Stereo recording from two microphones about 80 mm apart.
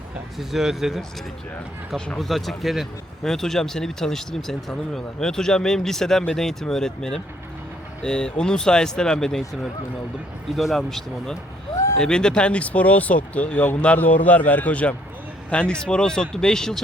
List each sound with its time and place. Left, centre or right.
0.3 s speech: centre
2.1 s speech: centre
10.5 s a man's voice: centre